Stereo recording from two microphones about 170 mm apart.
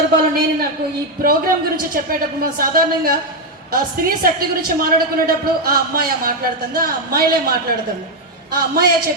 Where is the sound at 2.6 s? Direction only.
60° right (ahead or behind).